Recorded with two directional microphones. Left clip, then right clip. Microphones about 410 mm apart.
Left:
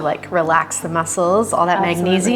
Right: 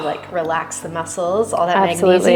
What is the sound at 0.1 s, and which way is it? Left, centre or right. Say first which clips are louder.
A woman's voice: left 6 dB; left.